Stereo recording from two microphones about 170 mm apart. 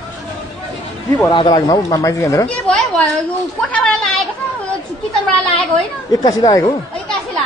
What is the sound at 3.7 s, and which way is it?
Speech, 5° left (ahead or behind).